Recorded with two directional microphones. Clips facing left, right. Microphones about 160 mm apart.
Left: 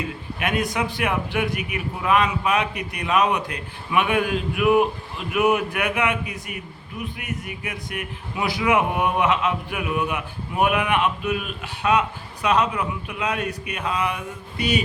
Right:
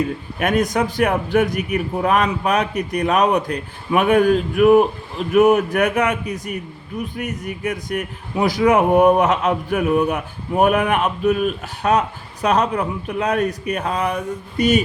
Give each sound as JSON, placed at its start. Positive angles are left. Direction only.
{"t": 0.3, "sound": "a man's voice", "side_deg": -45}